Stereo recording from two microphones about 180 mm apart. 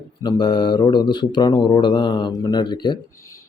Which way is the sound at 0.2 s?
25° left (ahead or behind).